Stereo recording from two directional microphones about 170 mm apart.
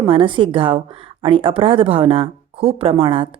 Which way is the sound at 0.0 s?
30° right (ahead or behind).